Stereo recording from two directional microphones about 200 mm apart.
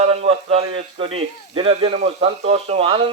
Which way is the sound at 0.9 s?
30° right (ahead or behind).